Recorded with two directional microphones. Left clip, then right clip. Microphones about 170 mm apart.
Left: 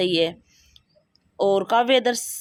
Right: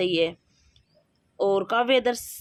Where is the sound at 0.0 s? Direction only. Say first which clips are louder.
Left 2 dB; 30° left (ahead or behind).